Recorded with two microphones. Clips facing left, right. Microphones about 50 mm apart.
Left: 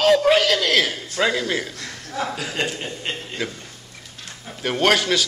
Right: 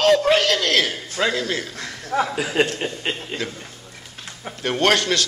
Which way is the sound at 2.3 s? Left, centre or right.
Centre.